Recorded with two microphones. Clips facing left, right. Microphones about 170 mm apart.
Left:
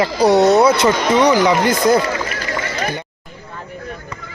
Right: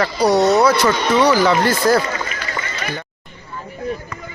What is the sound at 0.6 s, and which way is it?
Speech, 20° left (ahead or behind).